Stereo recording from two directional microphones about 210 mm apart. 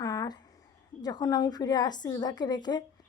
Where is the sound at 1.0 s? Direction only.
15° left (ahead or behind).